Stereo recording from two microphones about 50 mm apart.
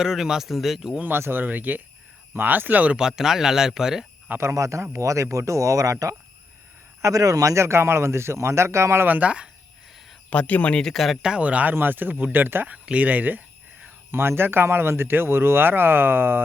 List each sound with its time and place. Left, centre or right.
0.0 s speech: centre
1.3 s speech: right
3.0 s speech: centre
4.4 s speech: right
9.0 s speech: right
10.2 s speech: left
10.9 s speech: centre
11.2 s speech: centre
11.4 s speech: right
11.7 s speech: right
12.8 s speech: right
14.1 s speech: right